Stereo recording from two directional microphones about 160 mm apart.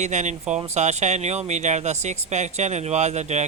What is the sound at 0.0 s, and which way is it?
Speech, 50° right (ahead or behind).